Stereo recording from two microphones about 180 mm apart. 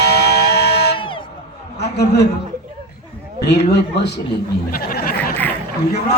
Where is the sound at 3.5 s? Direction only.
70° left (ahead or behind).